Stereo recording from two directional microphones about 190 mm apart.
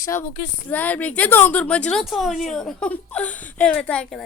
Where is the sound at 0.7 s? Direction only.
10° left (ahead or behind).